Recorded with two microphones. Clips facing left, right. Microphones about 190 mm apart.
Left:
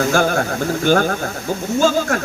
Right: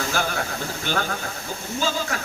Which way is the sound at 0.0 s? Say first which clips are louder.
Left 9 dB; 50° left (ahead or behind).